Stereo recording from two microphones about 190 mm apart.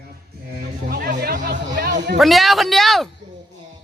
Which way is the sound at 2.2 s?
Centre (ahead or behind).